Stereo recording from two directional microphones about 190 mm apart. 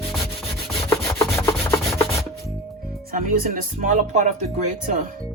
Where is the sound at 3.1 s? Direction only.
45° right (ahead or behind).